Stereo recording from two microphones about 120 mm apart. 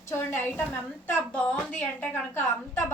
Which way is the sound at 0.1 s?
15° left (ahead or behind).